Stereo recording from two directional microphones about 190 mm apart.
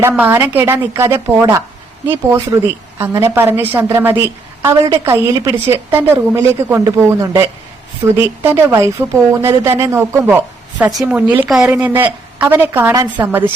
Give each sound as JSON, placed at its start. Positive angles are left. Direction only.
{"t": 0.1, "sound": "speech", "side_deg": -10}